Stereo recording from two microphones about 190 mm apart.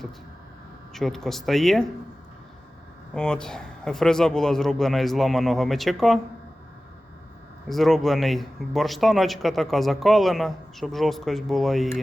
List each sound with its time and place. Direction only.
0.9 s speech: centre (ahead or behind)
3.2 s speech: 5° left (ahead or behind)
7.7 s speech: centre (ahead or behind)